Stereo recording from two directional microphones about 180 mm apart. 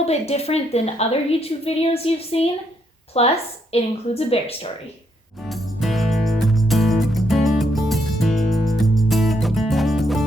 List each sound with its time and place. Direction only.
0.0 s a woman's voice: 35° left (ahead or behind)
5.5 s music: centre (ahead or behind)